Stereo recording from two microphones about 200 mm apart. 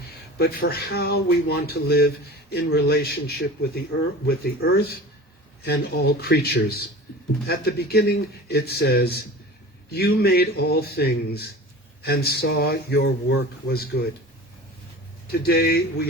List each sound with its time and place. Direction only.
0.3 s a man's voice: 50° left (ahead or behind)
15.4 s a man's voice: 50° left (ahead or behind)